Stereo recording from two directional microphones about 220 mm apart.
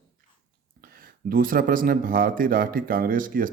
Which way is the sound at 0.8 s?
40° right (ahead or behind).